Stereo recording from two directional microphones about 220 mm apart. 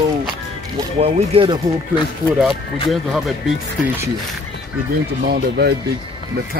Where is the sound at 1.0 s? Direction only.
25° right (ahead or behind).